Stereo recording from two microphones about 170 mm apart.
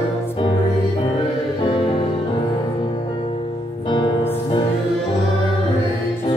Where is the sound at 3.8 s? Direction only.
25° left (ahead or behind).